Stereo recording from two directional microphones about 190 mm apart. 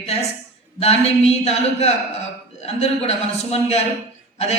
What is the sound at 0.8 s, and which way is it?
Speech, 35° left (ahead or behind).